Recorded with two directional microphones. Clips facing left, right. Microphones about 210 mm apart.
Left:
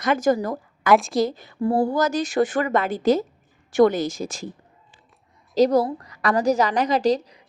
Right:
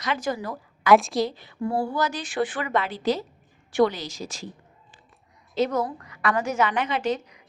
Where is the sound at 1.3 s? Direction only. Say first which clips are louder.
Left 5 dB; 45° left (ahead or behind).